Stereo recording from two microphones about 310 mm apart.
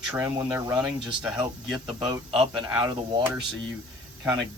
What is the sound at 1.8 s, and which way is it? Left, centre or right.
A man's voice, centre.